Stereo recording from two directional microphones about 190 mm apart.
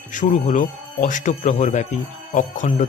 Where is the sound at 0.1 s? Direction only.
40° left (ahead or behind).